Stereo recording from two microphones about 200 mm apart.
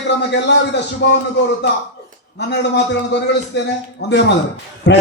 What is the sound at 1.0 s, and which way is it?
Speech, 65° left (ahead or behind).